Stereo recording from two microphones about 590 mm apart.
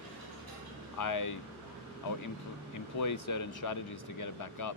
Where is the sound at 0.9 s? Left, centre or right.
Left.